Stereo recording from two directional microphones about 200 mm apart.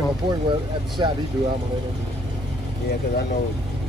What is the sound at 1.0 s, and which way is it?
Speech, 20° right (ahead or behind).